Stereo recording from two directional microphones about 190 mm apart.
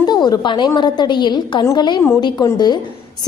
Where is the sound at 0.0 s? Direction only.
20° left (ahead or behind).